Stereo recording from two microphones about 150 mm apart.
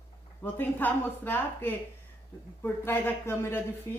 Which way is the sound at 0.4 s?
10° left (ahead or behind).